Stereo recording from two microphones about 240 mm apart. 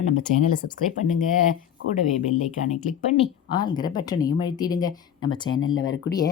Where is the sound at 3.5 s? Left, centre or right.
Centre.